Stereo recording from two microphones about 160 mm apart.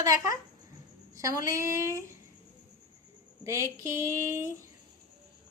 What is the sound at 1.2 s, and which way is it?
Speech, 20° right (ahead or behind).